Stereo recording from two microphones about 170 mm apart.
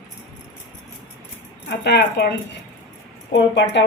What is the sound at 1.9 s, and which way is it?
Speech, 75° left (ahead or behind).